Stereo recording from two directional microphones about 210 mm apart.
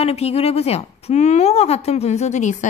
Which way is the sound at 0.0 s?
30° left (ahead or behind).